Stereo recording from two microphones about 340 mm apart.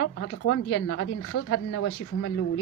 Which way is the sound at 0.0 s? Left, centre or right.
Left.